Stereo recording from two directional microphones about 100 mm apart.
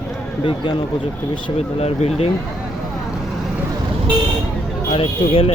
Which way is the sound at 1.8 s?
90° left.